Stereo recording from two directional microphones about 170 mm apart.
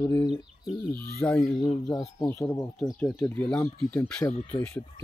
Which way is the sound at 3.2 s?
5° left (ahead or behind).